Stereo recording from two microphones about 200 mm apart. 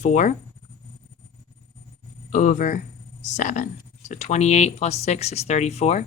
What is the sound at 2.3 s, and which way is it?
Speech, 40° left (ahead or behind).